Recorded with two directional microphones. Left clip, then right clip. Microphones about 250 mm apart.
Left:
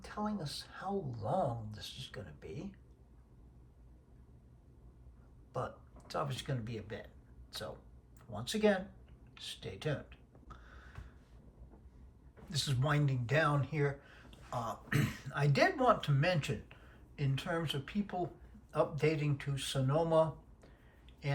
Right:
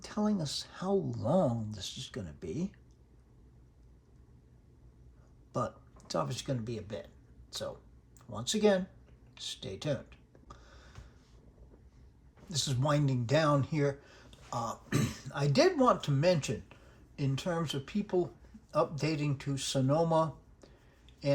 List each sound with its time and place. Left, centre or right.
0.0 s speech: right
5.5 s speech: right
9.3 s a sound: right
12.5 s speech: centre